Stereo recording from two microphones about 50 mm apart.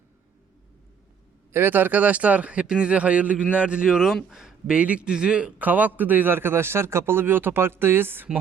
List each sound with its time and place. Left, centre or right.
1.5 s speech: right; by 4.7 s centre
4.7 s speech: right
5.5 s a man's voice: right